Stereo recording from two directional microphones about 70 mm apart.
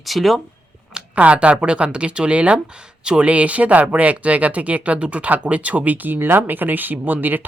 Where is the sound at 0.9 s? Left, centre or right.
Centre.